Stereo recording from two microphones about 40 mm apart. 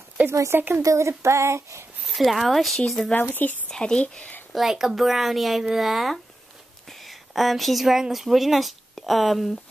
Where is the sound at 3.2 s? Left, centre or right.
Left.